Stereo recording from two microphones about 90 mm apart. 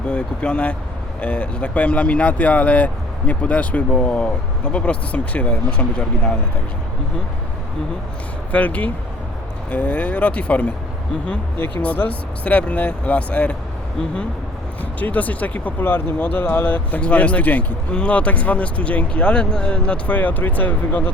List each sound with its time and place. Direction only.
0.1 s speech: 10° left (ahead or behind)
8.5 s speech: 15° left (ahead or behind)
11.8 s speech: 15° left (ahead or behind)
14.9 s speech: 15° left (ahead or behind)